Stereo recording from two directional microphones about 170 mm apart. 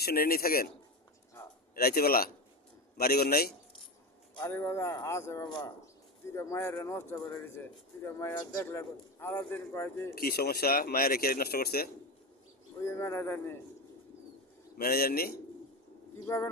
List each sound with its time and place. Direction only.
0.0 s speech: 65° left (ahead or behind)
1.7 s speech: 60° left (ahead or behind)
4.4 s a man's voice: 10° left (ahead or behind)
5.8 s a man's voice: 15° left (ahead or behind)
10.2 s speech: 65° left (ahead or behind)
12.8 s a man's voice: 15° left (ahead or behind)
14.8 s speech: 65° left (ahead or behind)
16.2 s a man's voice: 15° left (ahead or behind)